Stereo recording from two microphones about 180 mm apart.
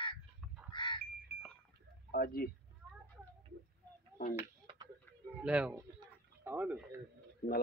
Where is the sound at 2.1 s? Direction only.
55° left (ahead or behind).